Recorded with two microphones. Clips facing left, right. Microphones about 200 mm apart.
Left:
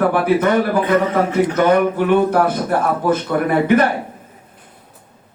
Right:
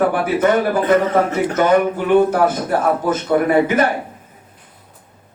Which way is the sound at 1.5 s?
55° left (ahead or behind).